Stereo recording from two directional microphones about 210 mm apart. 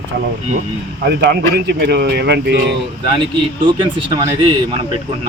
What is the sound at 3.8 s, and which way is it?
Speech, 20° right (ahead or behind).